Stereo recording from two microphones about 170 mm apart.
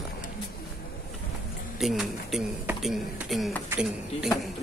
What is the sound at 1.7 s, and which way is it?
Speech, centre (ahead or behind).